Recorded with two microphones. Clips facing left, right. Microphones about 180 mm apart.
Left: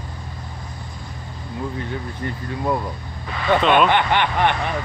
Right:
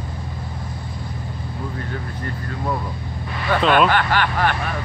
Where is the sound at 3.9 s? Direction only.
20° left (ahead or behind).